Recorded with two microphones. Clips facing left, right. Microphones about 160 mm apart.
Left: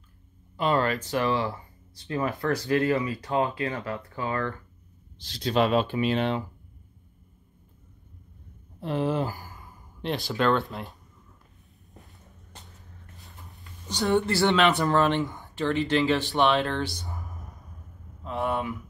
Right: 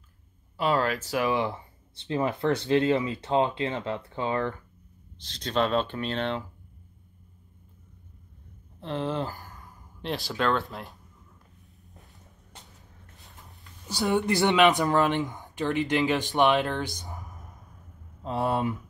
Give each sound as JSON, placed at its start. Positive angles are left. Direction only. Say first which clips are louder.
{"t": 0.6, "sound": "speech", "louder": "left 1 dB", "side_deg": -5}
{"t": 1.3, "sound": "speech", "louder": "even", "side_deg": -20}
{"t": 5.2, "sound": "speech", "louder": "left 3 dB", "side_deg": 0}
{"t": 8.8, "sound": "speech", "louder": "left 3 dB", "side_deg": 10}
{"t": 13.2, "sound": "a sound", "louder": "left 1 dB", "side_deg": 0}
{"t": 14.0, "sound": "speech", "louder": "left 1 dB", "side_deg": -15}
{"t": 18.2, "sound": "speech", "louder": "right 2 dB", "side_deg": -35}